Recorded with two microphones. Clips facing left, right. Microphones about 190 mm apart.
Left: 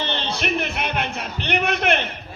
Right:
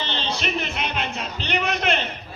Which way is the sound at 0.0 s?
55° left (ahead or behind).